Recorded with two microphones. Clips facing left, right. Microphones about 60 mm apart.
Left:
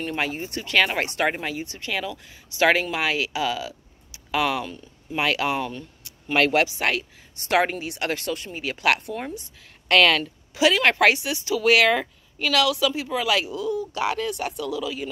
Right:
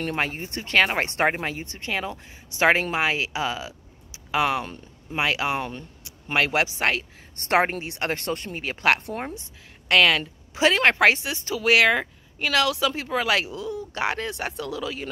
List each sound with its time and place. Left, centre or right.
0.1 s speech: right
6.3 s speech: centre; by 9.3 s right
9.8 s speech: centre
10.5 s speech: right